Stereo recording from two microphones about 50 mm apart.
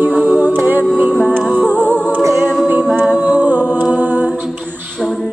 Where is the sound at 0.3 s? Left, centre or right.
Right.